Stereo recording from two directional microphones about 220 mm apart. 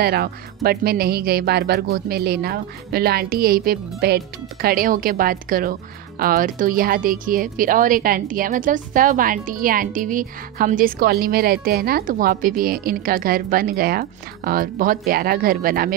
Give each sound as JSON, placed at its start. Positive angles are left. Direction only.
{"t": 0.0, "sound": "speech", "side_deg": -45}